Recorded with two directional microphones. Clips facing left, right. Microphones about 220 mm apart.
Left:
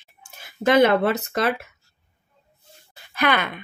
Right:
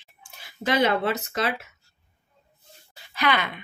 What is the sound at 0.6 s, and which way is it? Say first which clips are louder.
Speech: left 6 dB; 55° left (ahead or behind).